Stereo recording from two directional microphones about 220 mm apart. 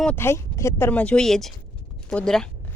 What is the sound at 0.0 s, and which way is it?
Speech, 10° left (ahead or behind).